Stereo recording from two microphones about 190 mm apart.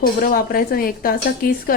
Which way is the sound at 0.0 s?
50° left (ahead or behind).